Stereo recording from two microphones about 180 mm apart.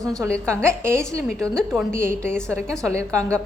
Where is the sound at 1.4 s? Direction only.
5° left (ahead or behind).